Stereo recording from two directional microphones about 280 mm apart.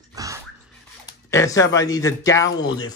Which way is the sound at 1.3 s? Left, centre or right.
Centre.